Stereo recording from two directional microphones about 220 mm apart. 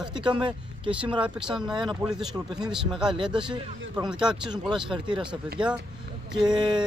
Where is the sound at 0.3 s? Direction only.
20° right (ahead or behind).